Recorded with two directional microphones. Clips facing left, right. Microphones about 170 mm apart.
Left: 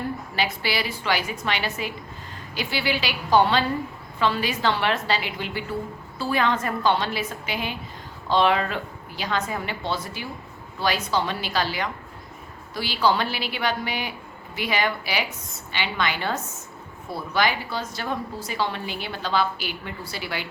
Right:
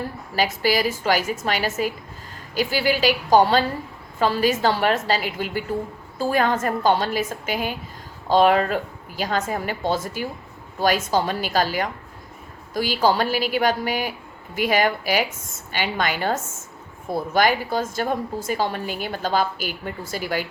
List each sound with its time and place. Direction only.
0.3 s a woman's voice: 45° right (ahead or behind)